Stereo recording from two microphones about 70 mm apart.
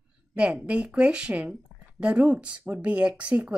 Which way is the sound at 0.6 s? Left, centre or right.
Centre.